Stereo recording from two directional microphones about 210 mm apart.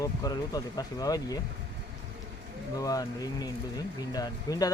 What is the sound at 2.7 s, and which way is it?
Speech, 15° left (ahead or behind).